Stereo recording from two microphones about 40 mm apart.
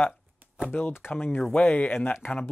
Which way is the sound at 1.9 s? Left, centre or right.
Left.